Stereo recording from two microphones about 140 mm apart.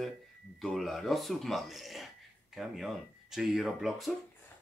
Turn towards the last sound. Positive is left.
turn(degrees=0)  # may be behind; listen again after turning